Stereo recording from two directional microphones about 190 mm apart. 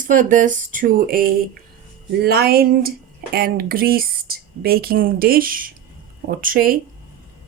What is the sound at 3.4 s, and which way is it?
Speech, 55° right (ahead or behind).